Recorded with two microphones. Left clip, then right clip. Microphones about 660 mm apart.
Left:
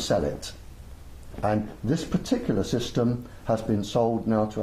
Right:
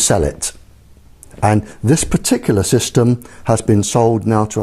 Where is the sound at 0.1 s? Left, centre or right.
Right.